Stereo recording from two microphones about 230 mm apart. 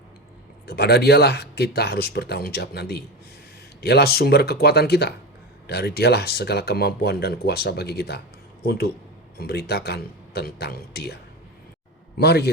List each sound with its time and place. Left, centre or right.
0.7 s speech: left
9.4 s a man's voice: left